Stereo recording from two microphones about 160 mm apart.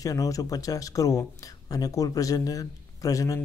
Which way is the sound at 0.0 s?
20° left (ahead or behind).